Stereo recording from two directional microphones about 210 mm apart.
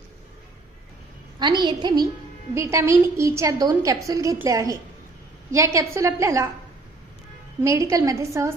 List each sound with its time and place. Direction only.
1.4 s a woman's voice: 20° right (ahead or behind)
7.6 s a woman's voice: 15° right (ahead or behind)